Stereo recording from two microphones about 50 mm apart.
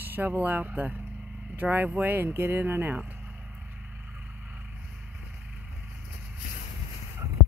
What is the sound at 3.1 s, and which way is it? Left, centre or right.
Vehicle, right.